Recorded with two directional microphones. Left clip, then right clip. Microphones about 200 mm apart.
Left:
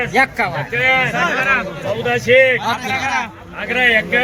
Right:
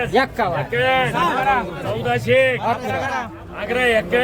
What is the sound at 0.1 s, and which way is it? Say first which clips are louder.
Speech: left 3 dB; 45° right (ahead or behind).